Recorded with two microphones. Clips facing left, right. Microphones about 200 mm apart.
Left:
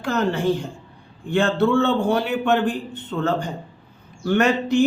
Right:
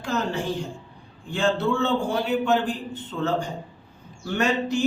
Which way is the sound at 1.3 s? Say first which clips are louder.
Left 5 dB; 60° left (ahead or behind).